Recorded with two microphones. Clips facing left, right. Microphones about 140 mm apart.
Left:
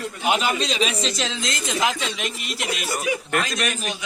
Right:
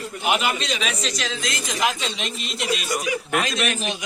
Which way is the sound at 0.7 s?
30° left (ahead or behind).